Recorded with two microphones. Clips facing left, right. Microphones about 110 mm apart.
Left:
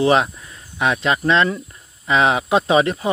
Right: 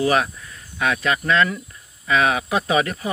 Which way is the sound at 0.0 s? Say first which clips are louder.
Left 3 dB; 25° left (ahead or behind).